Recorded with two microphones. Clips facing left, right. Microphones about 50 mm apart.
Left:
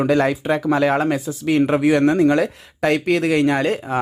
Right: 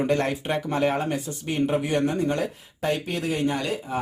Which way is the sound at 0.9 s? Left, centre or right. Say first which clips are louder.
Left 7 dB; left.